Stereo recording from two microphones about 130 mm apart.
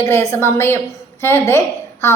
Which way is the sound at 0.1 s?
20° left (ahead or behind).